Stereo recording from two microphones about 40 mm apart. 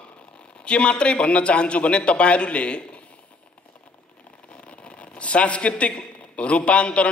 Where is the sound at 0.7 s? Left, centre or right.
Left.